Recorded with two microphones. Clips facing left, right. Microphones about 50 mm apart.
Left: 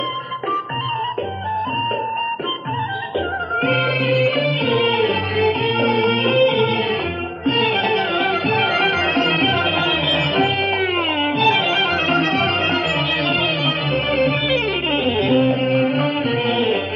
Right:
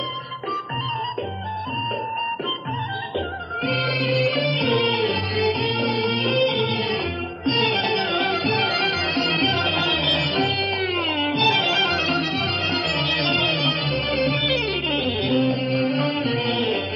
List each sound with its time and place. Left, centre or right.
3.6 s music: left
12.2 s music: left
14.1 s music: left